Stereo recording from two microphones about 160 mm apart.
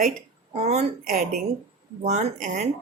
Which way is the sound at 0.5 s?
45° right (ahead or behind).